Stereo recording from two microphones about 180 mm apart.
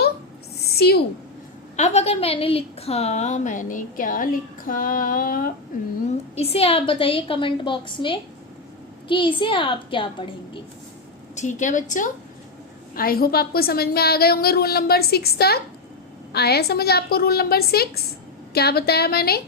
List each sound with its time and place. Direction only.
1.7 s a woman's voice: 40° left (ahead or behind)
6.1 s a woman's voice: 35° left (ahead or behind)
11.3 s a woman's voice: 45° left (ahead or behind); by 19.4 s 60° left (ahead or behind)